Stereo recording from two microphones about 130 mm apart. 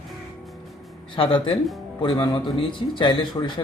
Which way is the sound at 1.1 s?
40° left (ahead or behind).